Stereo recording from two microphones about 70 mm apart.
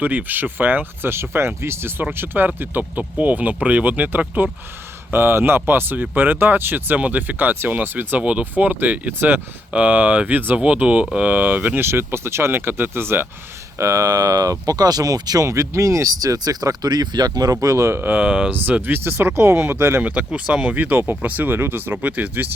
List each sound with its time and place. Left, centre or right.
0.0 s speech: right
11.8 s speech: right
13.7 s speech: right
17.8 s speech: right
18.1 s speech: centre
18.5 s speech: right
20.0 s speech: centre